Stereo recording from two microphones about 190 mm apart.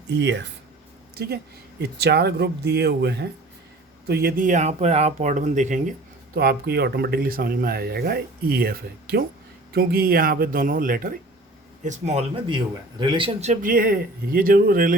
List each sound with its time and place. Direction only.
0.1 s speech: 70° right (ahead or behind)
1.8 s speech: 60° right (ahead or behind); by 5.9 s 40° right (ahead or behind)
6.3 s speech: 55° right (ahead or behind)
13.0 s speech: 25° right (ahead or behind); by 14.9 s 50° right (ahead or behind)